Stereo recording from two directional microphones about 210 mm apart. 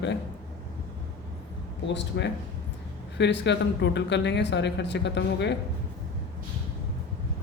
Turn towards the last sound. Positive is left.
turn(degrees=55)  # may be behind; listen again after turning